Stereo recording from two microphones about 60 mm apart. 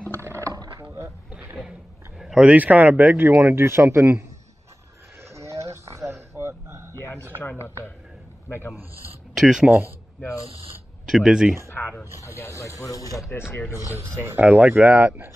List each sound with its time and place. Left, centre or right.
0.1 s roaring cats: right
1.7 s a sound: centre
2.4 s speech: right
5.3 s a sound: right
7.3 s speech: left
9.3 s speech: centre
11.1 s speech: centre
12.3 s snake: left
12.8 s speech: left
13.7 s speech: right
14.4 s speech: right